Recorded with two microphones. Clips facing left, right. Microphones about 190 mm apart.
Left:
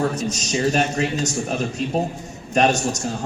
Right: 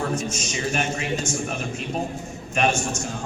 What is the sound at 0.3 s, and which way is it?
A man's voice, 40° left (ahead or behind).